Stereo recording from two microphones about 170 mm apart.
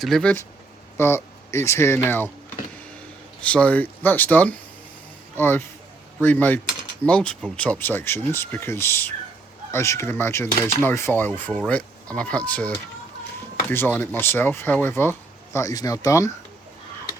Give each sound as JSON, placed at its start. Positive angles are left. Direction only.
{"t": 0.0, "sound": "speech", "side_deg": 5}
{"t": 3.4, "sound": "speech", "side_deg": 5}